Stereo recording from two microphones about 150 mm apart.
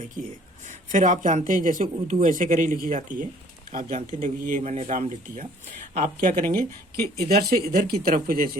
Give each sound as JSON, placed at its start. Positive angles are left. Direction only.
{"t": 0.6, "sound": "speech", "side_deg": -55}
{"t": 7.3, "sound": "speech", "side_deg": -90}